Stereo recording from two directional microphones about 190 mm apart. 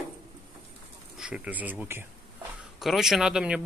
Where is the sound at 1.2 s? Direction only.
5° right (ahead or behind).